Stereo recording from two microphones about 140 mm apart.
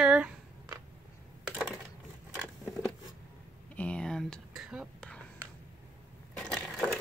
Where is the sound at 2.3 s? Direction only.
5° right (ahead or behind).